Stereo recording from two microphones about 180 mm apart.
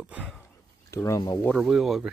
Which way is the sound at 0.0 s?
5° right (ahead or behind).